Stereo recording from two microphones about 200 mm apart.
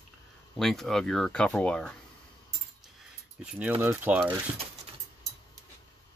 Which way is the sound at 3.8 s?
10° right (ahead or behind).